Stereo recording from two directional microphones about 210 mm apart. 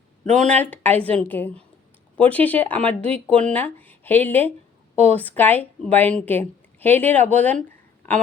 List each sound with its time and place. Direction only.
0.3 s a woman's voice: 5° left (ahead or behind)
3.0 s speech: 30° right (ahead or behind)
3.4 s a woman's voice: 10° left (ahead or behind)